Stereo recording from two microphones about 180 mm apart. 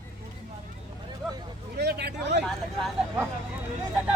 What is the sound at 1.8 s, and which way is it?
Speech, 65° right (ahead or behind).